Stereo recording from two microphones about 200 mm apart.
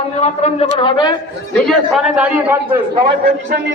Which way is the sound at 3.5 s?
50° right (ahead or behind).